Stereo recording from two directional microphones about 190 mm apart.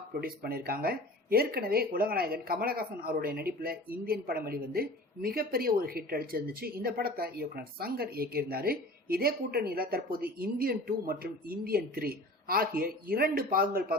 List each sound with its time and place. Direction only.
0.2 s speech: 50° right (ahead or behind)